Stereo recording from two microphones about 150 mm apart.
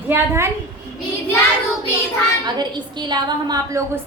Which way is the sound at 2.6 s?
30° right (ahead or behind).